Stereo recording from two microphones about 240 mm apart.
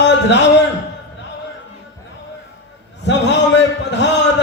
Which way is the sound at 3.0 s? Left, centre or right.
Left.